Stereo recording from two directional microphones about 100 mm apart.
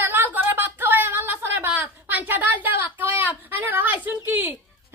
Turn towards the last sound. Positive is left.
turn(degrees=-20)  # may be behind; listen again after turning